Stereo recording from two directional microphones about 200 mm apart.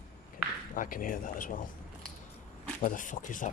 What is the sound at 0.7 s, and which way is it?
Speech, 45° left (ahead or behind).